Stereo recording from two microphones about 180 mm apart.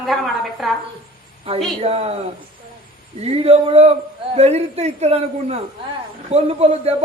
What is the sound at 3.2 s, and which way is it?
A man's voice, 35° right (ahead or behind).